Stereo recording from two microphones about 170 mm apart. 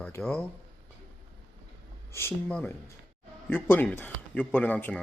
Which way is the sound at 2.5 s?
5° left (ahead or behind).